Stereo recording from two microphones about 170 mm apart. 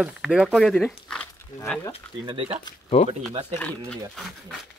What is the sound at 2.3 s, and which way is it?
Speech, 35° right (ahead or behind).